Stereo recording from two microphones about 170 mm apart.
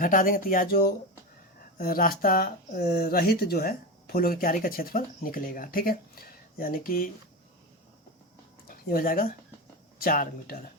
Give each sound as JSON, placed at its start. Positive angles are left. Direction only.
{"t": 0.0, "sound": "speech", "side_deg": 55}
{"t": 8.6, "sound": "speech", "side_deg": 55}